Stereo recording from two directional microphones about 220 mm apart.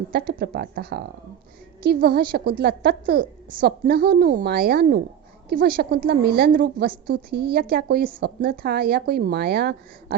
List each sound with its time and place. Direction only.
0.1 s a woman's voice: 45° right (ahead or behind)